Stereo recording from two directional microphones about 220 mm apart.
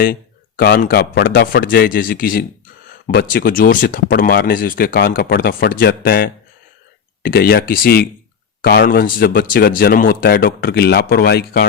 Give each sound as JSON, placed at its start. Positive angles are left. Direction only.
{"t": 0.0, "sound": "speech", "side_deg": 40}